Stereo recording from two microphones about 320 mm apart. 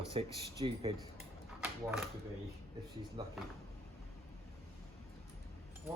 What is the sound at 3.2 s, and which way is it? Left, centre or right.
Speech, centre.